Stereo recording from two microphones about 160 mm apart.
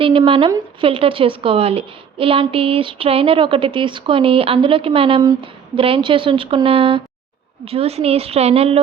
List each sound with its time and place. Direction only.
0.0 s a woman's voice: 35° right (ahead or behind)